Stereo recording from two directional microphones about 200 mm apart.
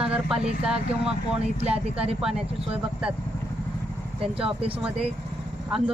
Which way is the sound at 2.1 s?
Centre (ahead or behind).